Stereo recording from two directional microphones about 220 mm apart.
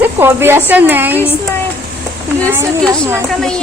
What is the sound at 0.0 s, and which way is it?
A woman's voice, 10° right (ahead or behind).